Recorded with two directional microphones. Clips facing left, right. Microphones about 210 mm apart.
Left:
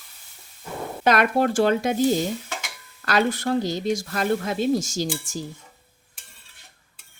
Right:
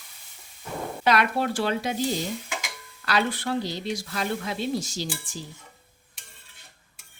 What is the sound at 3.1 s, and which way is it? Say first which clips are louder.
Speech: left 4 dB; 45° left (ahead or behind).